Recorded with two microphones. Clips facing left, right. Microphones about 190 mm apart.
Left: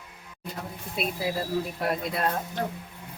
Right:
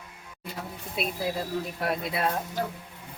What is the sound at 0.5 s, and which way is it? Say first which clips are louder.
Speech: even; centre (ahead or behind).